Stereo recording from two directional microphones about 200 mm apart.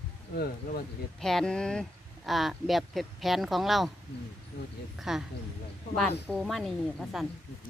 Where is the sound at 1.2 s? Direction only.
Centre (ahead or behind).